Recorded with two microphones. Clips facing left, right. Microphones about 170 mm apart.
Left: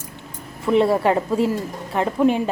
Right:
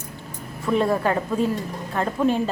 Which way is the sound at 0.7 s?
25° left (ahead or behind).